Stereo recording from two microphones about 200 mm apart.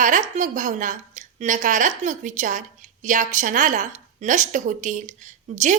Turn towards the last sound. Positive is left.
turn(degrees=-35)  # may be behind; listen again after turning